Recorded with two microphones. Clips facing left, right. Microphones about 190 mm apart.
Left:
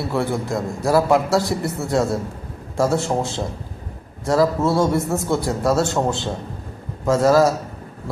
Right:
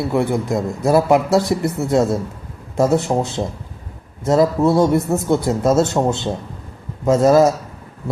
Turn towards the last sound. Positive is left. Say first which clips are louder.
# right 3 dB
turn(degrees=-20)  # may be behind; listen again after turning